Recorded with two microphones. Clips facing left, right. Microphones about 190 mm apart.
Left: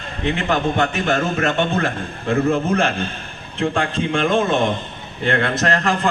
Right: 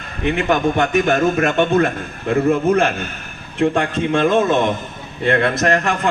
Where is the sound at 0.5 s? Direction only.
30° left (ahead or behind).